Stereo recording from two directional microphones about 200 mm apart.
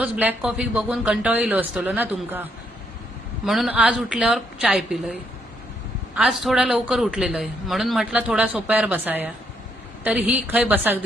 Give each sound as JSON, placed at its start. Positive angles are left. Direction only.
{"t": 0.0, "sound": "a man's voice", "side_deg": -5}
{"t": 6.1, "sound": "a man's voice", "side_deg": -5}